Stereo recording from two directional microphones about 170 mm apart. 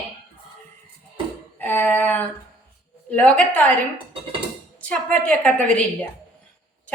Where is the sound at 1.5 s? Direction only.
10° left (ahead or behind).